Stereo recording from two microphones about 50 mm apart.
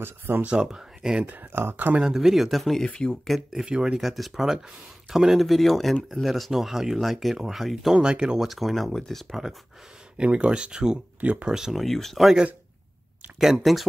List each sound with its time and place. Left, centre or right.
0.5 s speech: centre
1.2 s speech: right
2.0 s speech: centre
2.8 s speech: centre
3.3 s speech: centre
3.6 s speech: centre
4.0 s speech: centre
7.9 s speech: centre
8.5 s speech: centre
10.1 s speech: right
11.1 s speech: right
11.4 s speech: centre
11.7 s speech: centre
13.4 s speech: centre